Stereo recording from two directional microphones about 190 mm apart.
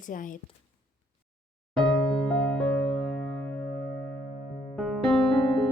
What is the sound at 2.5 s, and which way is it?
Music, centre (ahead or behind).